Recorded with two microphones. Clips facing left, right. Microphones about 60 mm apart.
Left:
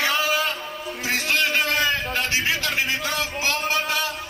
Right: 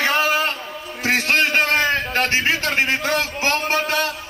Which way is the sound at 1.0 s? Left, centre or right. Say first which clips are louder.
Right 5 dB; right.